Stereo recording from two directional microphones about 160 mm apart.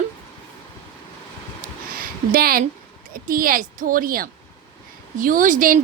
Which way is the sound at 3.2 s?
60° right (ahead or behind).